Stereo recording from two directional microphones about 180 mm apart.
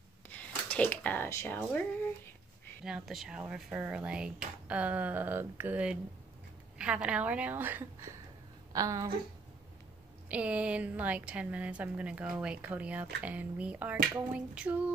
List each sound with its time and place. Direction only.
0.3 s a sound: 10° left (ahead or behind)
2.8 s a woman's voice: centre (ahead or behind); by 9.1 s 20° right (ahead or behind)
10.2 s a woman's voice: 5° right (ahead or behind)